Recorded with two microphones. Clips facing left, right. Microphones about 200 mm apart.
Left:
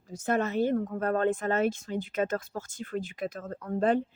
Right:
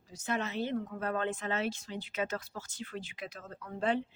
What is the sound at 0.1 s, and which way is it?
Speech, 50° left (ahead or behind).